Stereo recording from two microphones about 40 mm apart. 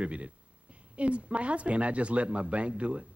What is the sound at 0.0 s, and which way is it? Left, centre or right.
Speech, right.